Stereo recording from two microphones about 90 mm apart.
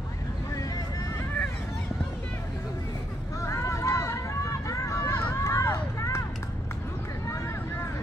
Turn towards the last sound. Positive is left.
turn(degrees=30)  # may be behind; listen again after turning